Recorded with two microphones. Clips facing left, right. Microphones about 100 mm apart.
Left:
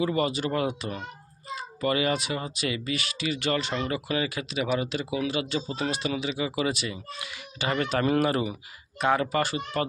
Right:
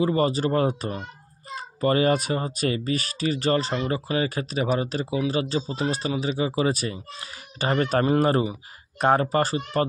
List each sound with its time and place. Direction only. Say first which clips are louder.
0.0 s speech: right 4 dB; 35° right (ahead or behind)